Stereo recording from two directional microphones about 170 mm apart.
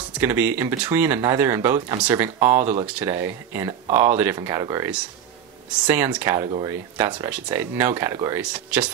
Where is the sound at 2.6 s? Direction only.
45° right (ahead or behind).